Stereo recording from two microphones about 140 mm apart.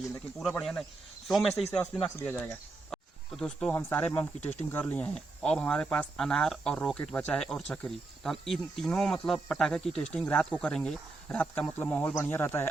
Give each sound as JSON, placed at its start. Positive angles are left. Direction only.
{"t": 0.6, "sound": "speech", "side_deg": 5}
{"t": 2.1, "sound": "speech", "side_deg": 15}
{"t": 2.9, "sound": "speech", "side_deg": 5}